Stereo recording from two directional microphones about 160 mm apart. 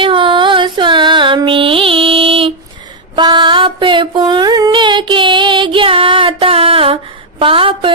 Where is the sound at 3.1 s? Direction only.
30° right (ahead or behind).